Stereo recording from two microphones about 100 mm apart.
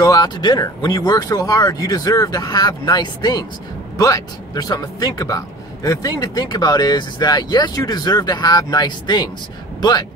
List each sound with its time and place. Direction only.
0.0 s speech: 40° left (ahead or behind)